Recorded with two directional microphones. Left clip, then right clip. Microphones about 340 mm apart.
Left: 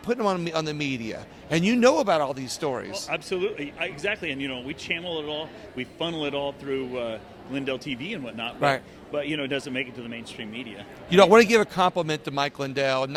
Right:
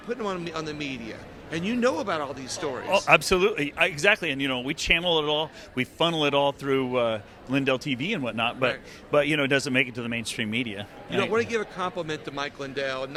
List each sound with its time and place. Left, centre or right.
0.1 s a man's voice: left
3.1 s speech: right
11.1 s a man's voice: left